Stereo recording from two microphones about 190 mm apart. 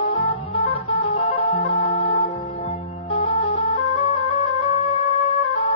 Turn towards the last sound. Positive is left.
turn(degrees=30)  # may be behind; listen again after turning